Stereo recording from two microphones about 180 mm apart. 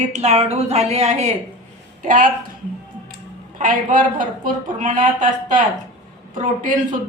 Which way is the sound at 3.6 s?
50° right (ahead or behind).